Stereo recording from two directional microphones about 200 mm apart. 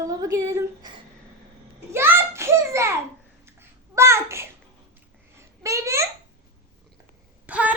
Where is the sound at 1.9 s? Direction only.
10° right (ahead or behind).